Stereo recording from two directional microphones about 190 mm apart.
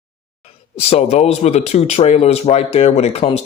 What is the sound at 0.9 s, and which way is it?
Speech, 35° left (ahead or behind).